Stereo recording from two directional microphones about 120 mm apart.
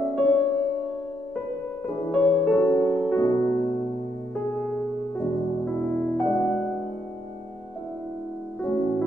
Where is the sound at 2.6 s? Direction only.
30° left (ahead or behind).